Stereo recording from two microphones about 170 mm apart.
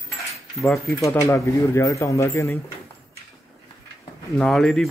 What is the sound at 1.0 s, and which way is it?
Speech, 15° left (ahead or behind).